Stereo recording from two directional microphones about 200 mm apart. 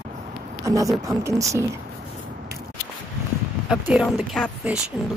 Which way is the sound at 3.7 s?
5° right (ahead or behind).